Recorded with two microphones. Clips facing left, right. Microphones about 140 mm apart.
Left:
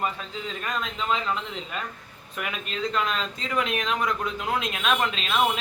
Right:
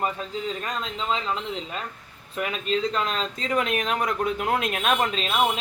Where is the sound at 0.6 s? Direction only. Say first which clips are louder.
Even; 30° right (ahead or behind).